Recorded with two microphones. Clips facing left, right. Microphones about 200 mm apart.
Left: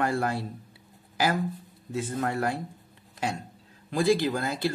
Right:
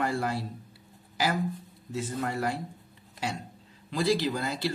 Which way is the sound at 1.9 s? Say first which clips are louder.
Left 2 dB; 55° left (ahead or behind).